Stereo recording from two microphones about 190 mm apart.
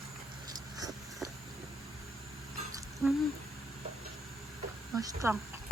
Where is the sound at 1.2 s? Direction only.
Centre (ahead or behind).